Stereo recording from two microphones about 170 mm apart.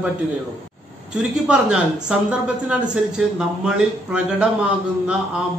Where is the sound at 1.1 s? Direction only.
5° right (ahead or behind).